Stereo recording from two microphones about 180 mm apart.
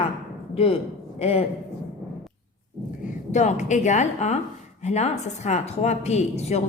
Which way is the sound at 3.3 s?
40° left (ahead or behind).